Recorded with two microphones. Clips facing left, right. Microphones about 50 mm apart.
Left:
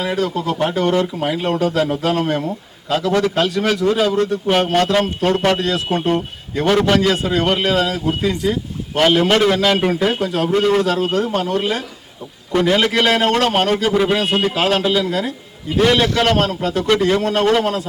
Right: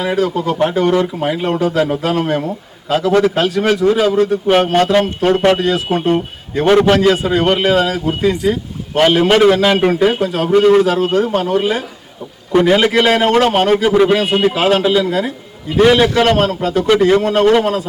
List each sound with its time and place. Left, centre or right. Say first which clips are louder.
0.0 s a man's voice: right 4 dB; centre